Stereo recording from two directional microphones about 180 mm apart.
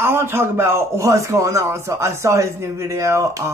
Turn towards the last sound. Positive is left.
turn(degrees=-15)  # may be behind; listen again after turning